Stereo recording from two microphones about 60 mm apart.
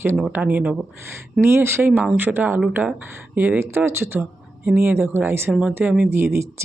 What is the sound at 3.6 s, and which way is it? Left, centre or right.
Speech, right.